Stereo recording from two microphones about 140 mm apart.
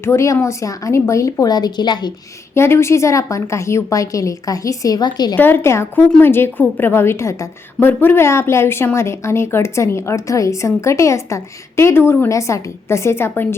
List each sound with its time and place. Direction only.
0.0 s a woman's voice: 20° left (ahead or behind)
2.6 s a woman's voice: 20° left (ahead or behind)
5.4 s a woman's voice: 15° left (ahead or behind)